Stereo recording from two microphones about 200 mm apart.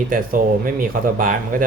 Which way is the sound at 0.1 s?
45° right (ahead or behind).